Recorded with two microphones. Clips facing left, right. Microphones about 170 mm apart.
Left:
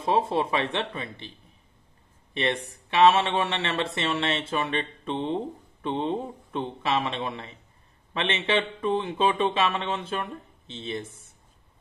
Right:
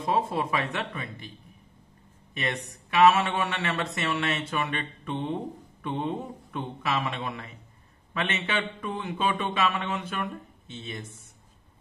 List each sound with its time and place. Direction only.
0.0 s speech: 25° left (ahead or behind)
2.3 s speech: 30° left (ahead or behind)